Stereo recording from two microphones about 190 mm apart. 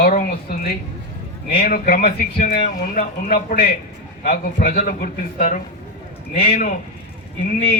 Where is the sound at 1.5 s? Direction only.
50° left (ahead or behind).